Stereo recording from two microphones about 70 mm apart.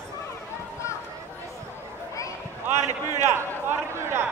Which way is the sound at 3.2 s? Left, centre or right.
Right.